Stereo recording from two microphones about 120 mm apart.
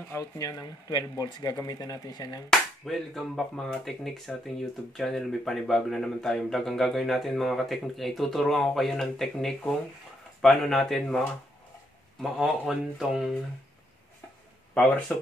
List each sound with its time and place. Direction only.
0.1 s speech: 30° left (ahead or behind)
2.8 s speech: centre (ahead or behind)
14.7 s speech: 10° left (ahead or behind)